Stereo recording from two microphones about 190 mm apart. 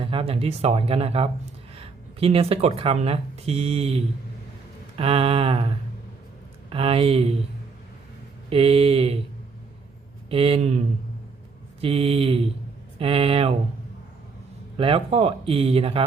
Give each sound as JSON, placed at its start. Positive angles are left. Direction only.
{"t": 0.0, "sound": "speech", "side_deg": -30}
{"t": 6.7, "sound": "speech", "side_deg": -30}
{"t": 8.4, "sound": "speech", "side_deg": -30}
{"t": 10.2, "sound": "speech", "side_deg": -30}
{"t": 14.8, "sound": "speech", "side_deg": -30}